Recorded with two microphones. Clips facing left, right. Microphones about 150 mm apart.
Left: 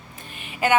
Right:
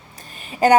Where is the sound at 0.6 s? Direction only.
40° right (ahead or behind).